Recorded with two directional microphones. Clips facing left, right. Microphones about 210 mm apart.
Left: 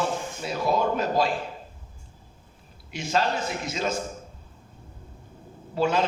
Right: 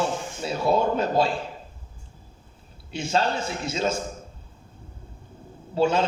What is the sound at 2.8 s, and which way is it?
A man's voice, 30° right (ahead or behind).